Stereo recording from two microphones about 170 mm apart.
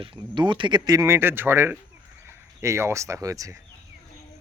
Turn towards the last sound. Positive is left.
turn(degrees=-20)  # may be behind; listen again after turning